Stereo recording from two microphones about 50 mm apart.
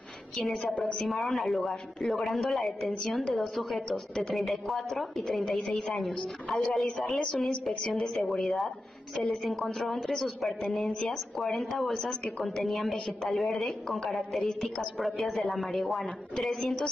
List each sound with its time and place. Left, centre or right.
0.9 s speech: centre